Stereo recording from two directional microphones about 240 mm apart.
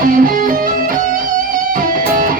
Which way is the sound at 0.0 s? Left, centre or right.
Right.